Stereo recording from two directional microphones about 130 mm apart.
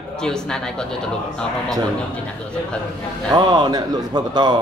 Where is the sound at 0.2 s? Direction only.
5° left (ahead or behind).